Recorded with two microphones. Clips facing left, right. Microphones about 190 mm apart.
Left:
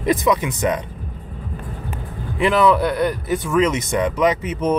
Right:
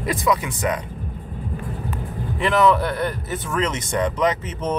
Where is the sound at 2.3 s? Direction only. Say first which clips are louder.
Left 2 dB; 15° left (ahead or behind).